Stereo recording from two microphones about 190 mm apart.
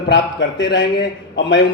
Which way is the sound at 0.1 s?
70° left (ahead or behind).